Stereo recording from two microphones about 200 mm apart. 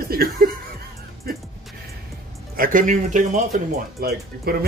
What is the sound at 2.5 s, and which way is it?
Speech, 45° right (ahead or behind).